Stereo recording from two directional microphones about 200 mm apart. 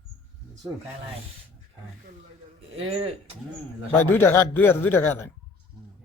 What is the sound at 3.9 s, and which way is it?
A man's voice, 10° left (ahead or behind).